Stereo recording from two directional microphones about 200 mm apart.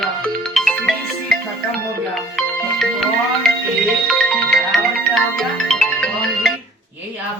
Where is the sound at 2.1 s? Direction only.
Centre (ahead or behind).